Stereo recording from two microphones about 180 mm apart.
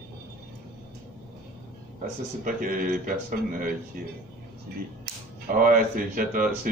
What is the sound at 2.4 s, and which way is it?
Speech, 50° right (ahead or behind).